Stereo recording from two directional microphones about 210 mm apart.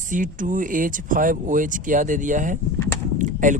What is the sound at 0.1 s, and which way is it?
Speech, 40° right (ahead or behind).